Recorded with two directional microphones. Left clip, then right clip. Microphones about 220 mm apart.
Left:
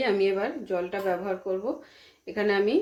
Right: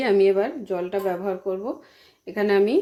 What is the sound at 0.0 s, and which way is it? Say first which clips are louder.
Speech: right 6 dB; 40° right (ahead or behind).